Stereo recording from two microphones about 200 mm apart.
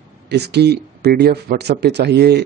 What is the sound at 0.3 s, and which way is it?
A man's voice, 55° right (ahead or behind).